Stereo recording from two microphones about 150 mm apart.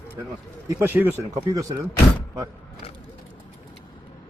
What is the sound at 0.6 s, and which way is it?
Speech, 20° right (ahead or behind).